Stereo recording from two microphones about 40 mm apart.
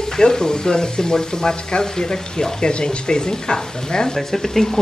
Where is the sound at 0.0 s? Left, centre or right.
Centre.